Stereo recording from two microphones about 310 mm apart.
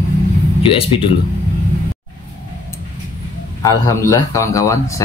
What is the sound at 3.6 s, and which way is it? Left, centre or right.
Speech, centre.